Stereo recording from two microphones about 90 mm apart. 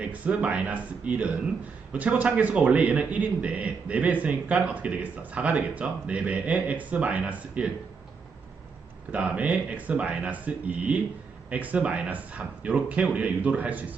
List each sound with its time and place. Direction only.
0.0 s a man's voice: 15° right (ahead or behind)
9.1 s a man's voice: 15° right (ahead or behind)